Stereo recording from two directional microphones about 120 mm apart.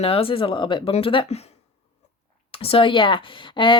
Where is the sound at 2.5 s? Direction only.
50° left (ahead or behind).